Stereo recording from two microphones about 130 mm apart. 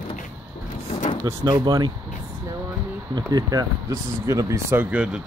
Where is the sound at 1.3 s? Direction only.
30° right (ahead or behind).